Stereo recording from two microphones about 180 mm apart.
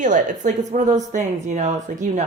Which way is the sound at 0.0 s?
45° right (ahead or behind).